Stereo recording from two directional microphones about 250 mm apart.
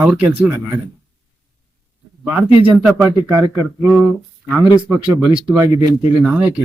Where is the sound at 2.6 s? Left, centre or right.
Centre.